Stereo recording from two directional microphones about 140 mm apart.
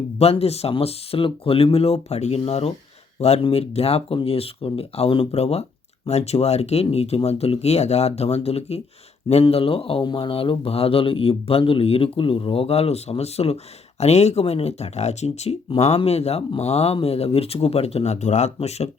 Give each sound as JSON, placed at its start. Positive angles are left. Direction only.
{"t": 0.2, "sound": "speech", "side_deg": 45}